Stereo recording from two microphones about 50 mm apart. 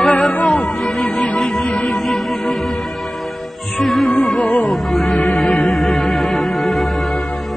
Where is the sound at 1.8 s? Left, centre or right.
Centre.